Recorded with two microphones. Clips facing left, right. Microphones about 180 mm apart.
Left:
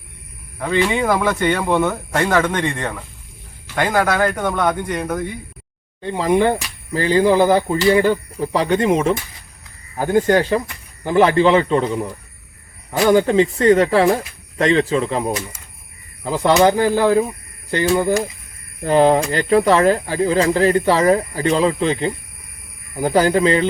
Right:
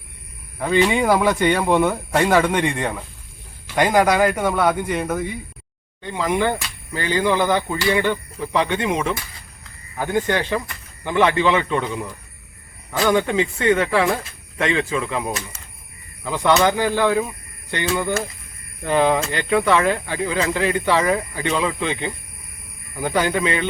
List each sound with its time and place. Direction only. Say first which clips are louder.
0.6 s speech: even; 10° right (ahead or behind)
6.0 s speech: left 5 dB; 35° left (ahead or behind)